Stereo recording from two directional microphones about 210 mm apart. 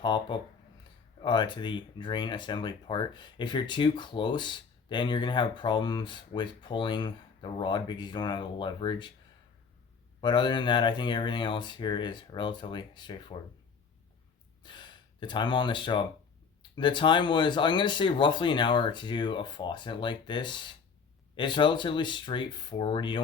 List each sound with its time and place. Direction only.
0.0 s speech: 20° left (ahead or behind)
10.2 s speech: 20° left (ahead or behind)
14.6 s speech: 20° left (ahead or behind)